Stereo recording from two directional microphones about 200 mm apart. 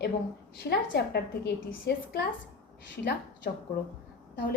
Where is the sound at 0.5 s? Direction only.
50° left (ahead or behind).